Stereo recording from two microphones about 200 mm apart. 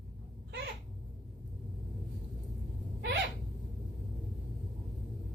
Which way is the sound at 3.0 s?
55° right (ahead or behind).